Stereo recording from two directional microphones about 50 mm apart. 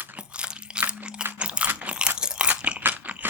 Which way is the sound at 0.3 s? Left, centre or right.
Right.